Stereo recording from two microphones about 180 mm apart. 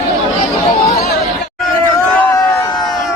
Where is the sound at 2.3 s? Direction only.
20° left (ahead or behind).